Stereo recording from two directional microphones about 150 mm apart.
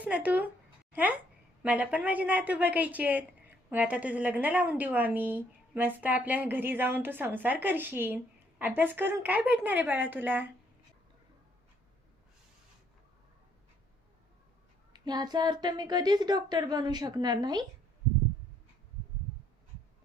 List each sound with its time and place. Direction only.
0.0 s a woman's voice: 10° right (ahead or behind)
1.6 s a woman's voice: 10° right (ahead or behind)
14.9 s a woman's voice: 25° right (ahead or behind)